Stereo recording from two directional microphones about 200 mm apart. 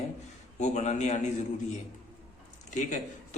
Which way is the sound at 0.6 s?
35° left (ahead or behind).